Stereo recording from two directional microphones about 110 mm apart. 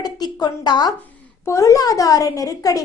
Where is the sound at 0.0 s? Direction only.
35° left (ahead or behind).